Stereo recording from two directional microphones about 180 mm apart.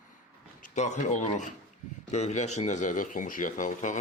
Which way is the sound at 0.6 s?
45° left (ahead or behind).